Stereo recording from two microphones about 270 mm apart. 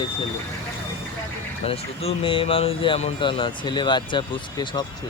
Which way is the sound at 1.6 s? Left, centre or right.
Left.